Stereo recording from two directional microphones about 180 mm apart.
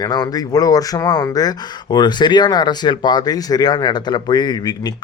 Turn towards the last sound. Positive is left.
turn(degrees=20)  # may be behind; listen again after turning